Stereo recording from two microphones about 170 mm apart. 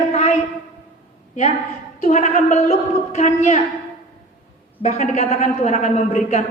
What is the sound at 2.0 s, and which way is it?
A woman's voice, 45° left (ahead or behind).